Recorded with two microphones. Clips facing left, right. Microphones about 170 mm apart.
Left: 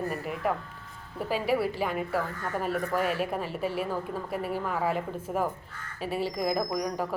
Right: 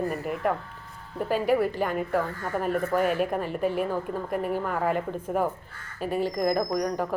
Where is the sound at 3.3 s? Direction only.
5° left (ahead or behind).